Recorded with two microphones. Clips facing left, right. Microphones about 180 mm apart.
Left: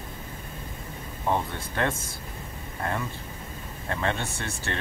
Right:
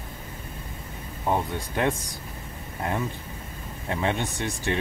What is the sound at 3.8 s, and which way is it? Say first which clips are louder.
Speech: right 2 dB; 15° right (ahead or behind).